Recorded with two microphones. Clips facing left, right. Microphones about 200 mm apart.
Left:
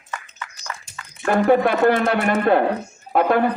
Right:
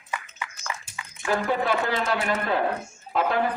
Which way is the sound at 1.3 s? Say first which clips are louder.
Left 8 dB; 60° left (ahead or behind).